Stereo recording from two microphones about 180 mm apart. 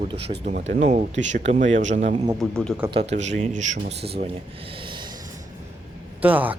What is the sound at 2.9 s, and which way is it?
Speech, 35° right (ahead or behind).